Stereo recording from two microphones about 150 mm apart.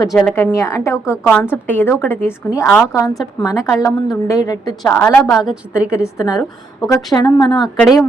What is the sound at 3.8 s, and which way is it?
Speech, 20° left (ahead or behind).